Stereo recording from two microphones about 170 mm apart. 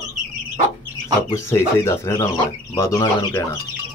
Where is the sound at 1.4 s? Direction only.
15° left (ahead or behind).